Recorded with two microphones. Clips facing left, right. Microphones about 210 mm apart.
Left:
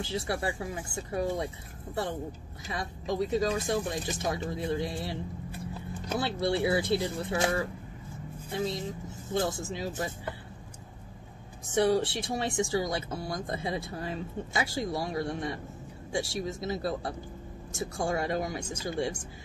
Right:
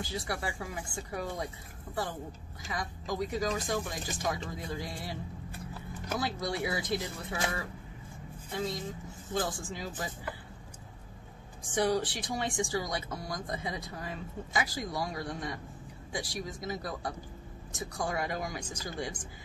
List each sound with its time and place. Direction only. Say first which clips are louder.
0.0 s speech: left 4 dB; 25° left (ahead or behind)
2.7 s speech: left 3 dB; 25° left (ahead or behind)
11.7 s speech: left 4 dB; 25° left (ahead or behind)